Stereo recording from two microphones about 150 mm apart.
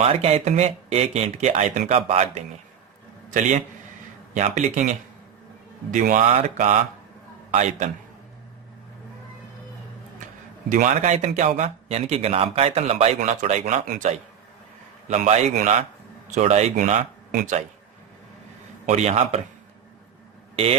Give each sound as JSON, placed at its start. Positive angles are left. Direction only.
{"t": 0.0, "sound": "speech", "side_deg": -45}
{"t": 3.2, "sound": "a man's voice", "side_deg": -60}
{"t": 10.7, "sound": "speech", "side_deg": -60}
{"t": 13.1, "sound": "speech", "side_deg": -55}
{"t": 18.9, "sound": "speech", "side_deg": -50}